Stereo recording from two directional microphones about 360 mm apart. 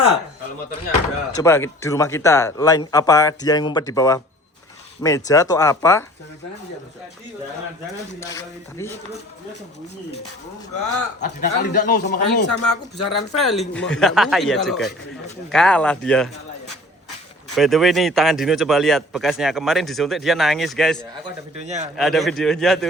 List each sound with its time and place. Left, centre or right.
1.4 s a man's voice: centre
8.2 s a man's voice: centre
11.3 s speech: left
12.5 s speech: left
13.5 s speech: centre
17.5 s speech: centre
21.6 s a man's voice: centre
21.9 s speech: centre